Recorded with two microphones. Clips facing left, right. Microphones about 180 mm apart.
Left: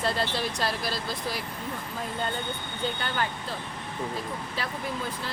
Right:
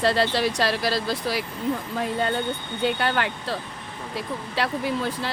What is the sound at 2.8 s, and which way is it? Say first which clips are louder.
Speech: right 7 dB; 75° right (ahead or behind).